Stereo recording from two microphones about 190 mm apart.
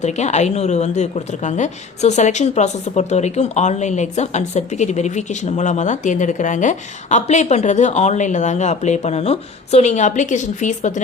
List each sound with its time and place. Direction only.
0.0 s a woman's voice: 35° left (ahead or behind)